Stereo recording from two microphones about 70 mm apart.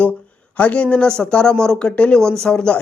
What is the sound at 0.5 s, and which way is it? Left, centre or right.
A man's voice, left.